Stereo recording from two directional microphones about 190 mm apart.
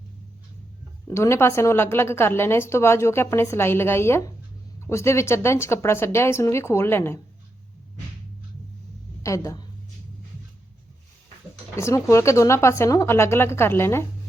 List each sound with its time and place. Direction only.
1.0 s a woman's voice: 15° left (ahead or behind)
9.2 s a woman's voice: 15° left (ahead or behind)
11.8 s a woman's voice: 15° left (ahead or behind)